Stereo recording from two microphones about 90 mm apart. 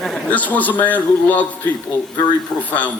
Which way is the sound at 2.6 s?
15° left (ahead or behind).